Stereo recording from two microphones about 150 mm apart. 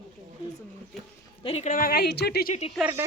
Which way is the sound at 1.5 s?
45° left (ahead or behind).